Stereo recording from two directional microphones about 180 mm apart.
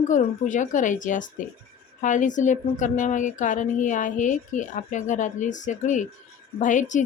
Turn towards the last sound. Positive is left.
turn(degrees=45)  # may be behind; listen again after turning